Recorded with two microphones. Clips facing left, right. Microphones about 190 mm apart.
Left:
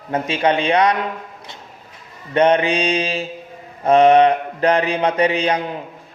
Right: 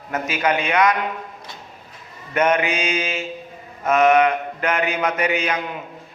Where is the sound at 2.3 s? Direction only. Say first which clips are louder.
Left 4 dB; 30° left (ahead or behind).